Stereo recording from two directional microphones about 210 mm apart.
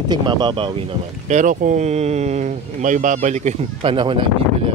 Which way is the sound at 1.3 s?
40° right (ahead or behind).